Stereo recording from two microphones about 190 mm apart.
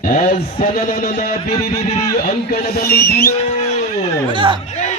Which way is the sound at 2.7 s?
55° left (ahead or behind).